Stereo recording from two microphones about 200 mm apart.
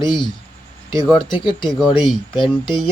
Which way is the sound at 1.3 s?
25° left (ahead or behind).